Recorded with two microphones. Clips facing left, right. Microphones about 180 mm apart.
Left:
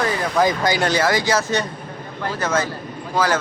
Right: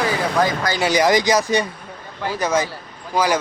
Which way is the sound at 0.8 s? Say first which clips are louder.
Right 2 dB; 15° right (ahead or behind).